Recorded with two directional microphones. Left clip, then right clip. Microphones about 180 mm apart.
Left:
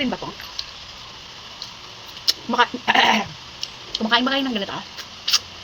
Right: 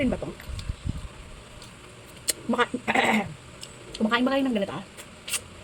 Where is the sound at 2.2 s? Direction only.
20° right (ahead or behind).